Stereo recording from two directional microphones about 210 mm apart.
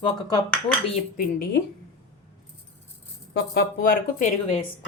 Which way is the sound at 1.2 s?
50° left (ahead or behind).